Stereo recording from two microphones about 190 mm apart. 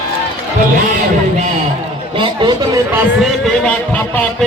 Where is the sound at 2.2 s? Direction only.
25° right (ahead or behind).